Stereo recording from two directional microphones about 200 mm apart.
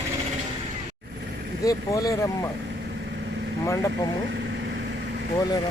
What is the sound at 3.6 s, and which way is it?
Speech, 15° left (ahead or behind).